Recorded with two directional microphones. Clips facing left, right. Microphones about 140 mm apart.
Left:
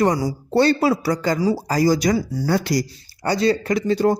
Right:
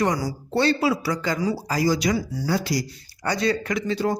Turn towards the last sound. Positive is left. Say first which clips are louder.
# left 6 dB
turn(degrees=40)  # may be behind; listen again after turning